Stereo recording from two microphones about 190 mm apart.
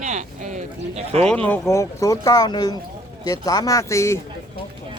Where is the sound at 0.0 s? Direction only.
40° right (ahead or behind).